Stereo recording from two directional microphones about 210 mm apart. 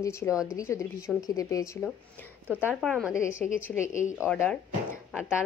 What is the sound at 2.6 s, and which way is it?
A woman's voice, centre (ahead or behind).